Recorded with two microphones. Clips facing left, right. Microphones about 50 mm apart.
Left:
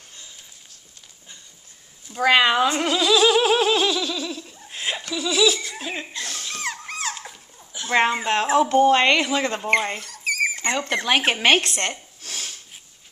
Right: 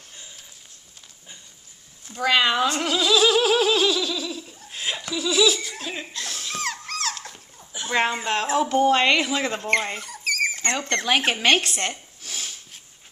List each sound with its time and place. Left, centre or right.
2.1 s speech: left
2.4 s a sound: centre
4.6 s chuckle: centre
5.1 s speech: centre
5.7 s dog: centre
7.9 s speech: centre
8.6 s speech: centre
11.6 s speech: centre
12.2 s a sound: centre